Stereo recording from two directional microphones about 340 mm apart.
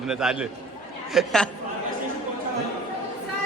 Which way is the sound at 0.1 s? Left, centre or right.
Centre.